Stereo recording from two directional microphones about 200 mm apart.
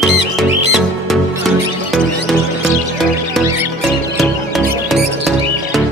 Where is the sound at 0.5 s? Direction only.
Centre (ahead or behind).